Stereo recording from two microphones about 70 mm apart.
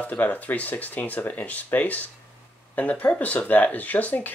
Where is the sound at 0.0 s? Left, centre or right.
Left.